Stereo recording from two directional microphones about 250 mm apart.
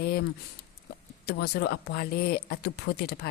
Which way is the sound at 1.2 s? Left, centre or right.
Left.